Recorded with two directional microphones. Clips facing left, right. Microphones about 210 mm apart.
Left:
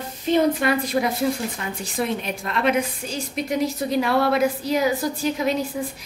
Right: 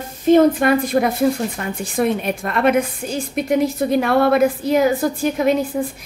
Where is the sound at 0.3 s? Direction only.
50° right (ahead or behind).